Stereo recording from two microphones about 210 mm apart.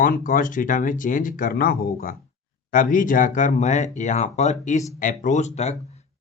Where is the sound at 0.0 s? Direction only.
40° left (ahead or behind).